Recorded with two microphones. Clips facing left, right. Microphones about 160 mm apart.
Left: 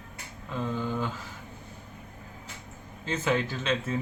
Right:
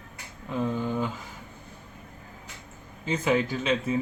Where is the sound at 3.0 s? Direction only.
15° right (ahead or behind).